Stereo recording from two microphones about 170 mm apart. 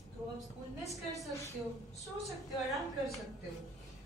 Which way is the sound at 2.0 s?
Centre (ahead or behind).